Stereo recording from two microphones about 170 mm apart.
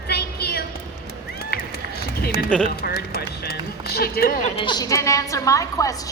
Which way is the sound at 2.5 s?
5° left (ahead or behind).